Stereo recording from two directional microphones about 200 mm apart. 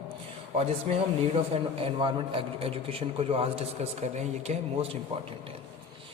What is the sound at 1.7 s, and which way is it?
A man's voice, 25° right (ahead or behind).